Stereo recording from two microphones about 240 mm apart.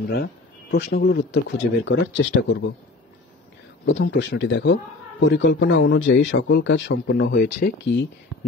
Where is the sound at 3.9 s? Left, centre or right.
Left.